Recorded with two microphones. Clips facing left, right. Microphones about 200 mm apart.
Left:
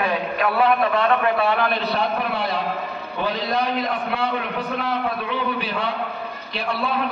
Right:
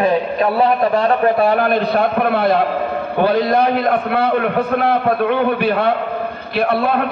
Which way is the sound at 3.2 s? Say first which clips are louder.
Right 9 dB; 50° right (ahead or behind).